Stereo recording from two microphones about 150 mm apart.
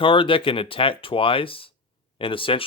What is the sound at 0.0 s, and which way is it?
Speech, 35° left (ahead or behind).